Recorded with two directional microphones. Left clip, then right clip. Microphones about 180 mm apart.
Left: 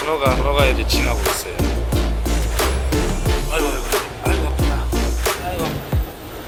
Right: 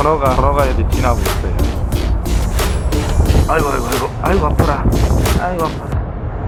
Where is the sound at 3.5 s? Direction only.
25° left (ahead or behind).